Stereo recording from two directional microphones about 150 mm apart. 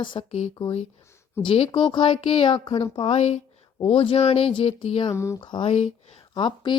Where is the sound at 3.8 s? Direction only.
35° left (ahead or behind).